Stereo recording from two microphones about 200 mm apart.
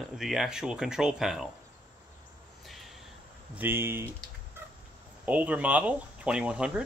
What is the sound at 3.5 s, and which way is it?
Speech, 10° right (ahead or behind).